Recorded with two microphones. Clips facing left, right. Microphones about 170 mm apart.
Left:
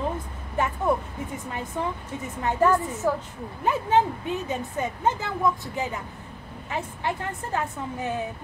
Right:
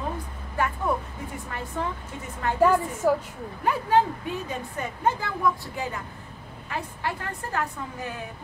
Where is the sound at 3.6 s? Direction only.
20° left (ahead or behind).